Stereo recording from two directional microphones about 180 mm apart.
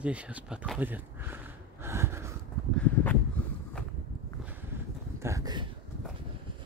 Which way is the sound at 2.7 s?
10° left (ahead or behind).